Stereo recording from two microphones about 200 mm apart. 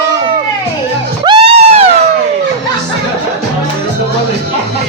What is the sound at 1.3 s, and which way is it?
Music, 30° right (ahead or behind).